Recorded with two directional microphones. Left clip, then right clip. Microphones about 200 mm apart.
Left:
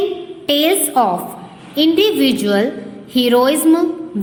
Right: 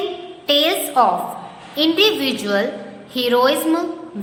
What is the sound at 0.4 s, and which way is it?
A woman's voice, 35° left (ahead or behind).